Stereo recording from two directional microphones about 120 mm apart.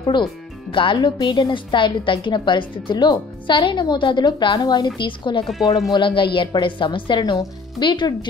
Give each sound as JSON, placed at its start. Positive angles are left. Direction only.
{"t": 0.0, "sound": "a woman's voice", "side_deg": 40}